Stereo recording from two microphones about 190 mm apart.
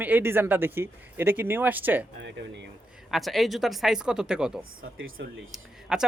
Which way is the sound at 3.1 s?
Centre (ahead or behind).